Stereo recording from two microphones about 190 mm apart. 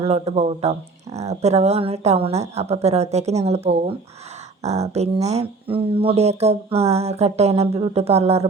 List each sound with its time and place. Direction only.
0.1 s speech: 35° right (ahead or behind)